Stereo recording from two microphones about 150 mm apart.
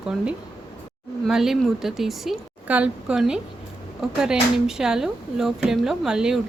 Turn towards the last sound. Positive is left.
turn(degrees=-5)  # may be behind; listen again after turning